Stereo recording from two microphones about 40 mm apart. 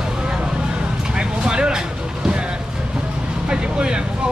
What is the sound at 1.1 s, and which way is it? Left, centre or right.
Vehicle, right.